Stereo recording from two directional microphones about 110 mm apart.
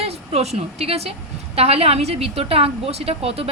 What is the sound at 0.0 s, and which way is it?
A woman's voice, 70° right (ahead or behind).